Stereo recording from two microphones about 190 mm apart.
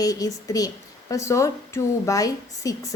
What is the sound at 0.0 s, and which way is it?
A woman's voice, 20° left (ahead or behind).